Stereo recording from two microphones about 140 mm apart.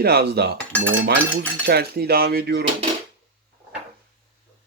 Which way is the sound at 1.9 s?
90° right.